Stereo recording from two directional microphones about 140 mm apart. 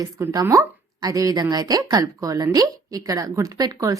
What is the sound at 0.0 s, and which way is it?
Speech, 20° right (ahead or behind).